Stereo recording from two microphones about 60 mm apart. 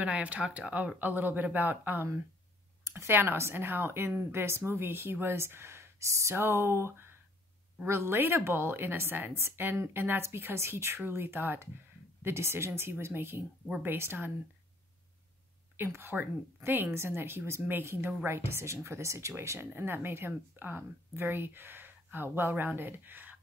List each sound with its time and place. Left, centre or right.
0.0 s speech: right
0.9 s a woman's voice: right
2.8 s speech: right
6.3 s a woman's voice: right
15.7 s a woman's voice: right